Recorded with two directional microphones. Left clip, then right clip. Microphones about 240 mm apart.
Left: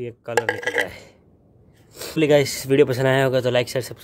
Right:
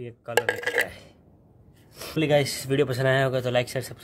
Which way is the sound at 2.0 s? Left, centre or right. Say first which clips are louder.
Left 5 dB; left.